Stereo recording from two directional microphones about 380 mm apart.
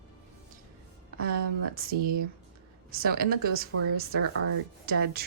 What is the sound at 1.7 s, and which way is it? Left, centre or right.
Speech, right.